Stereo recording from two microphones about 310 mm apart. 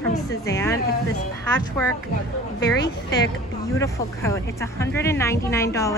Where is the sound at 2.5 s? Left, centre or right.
Left.